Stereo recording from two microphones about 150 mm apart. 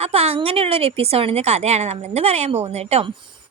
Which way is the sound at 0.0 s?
45° right (ahead or behind).